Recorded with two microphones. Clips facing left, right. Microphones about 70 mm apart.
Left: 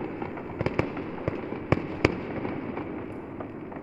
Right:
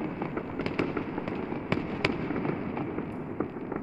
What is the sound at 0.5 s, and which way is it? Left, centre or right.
Fireworks, centre.